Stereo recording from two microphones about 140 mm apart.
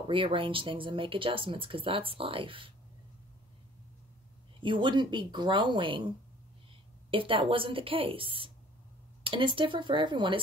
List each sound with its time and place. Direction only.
0.1 s speech: 40° right (ahead or behind)
4.6 s speech: 35° right (ahead or behind)